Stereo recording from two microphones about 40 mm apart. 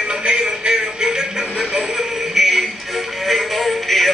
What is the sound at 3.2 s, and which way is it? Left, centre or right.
Synthetic singing, centre.